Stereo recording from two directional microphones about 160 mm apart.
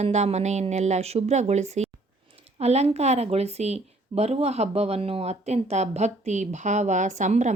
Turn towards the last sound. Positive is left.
turn(degrees=-50)  # may be behind; listen again after turning